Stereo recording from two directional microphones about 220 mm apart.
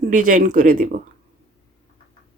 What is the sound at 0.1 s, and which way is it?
Speech, 35° right (ahead or behind).